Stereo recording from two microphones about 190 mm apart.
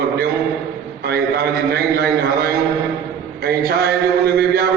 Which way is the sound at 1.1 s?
55° right (ahead or behind).